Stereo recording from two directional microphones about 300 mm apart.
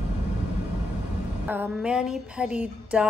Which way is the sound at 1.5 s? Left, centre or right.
Centre.